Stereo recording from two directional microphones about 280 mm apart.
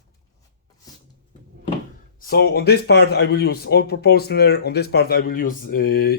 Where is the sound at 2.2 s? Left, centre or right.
Left.